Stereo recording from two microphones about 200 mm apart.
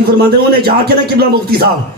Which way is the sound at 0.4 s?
50° right (ahead or behind).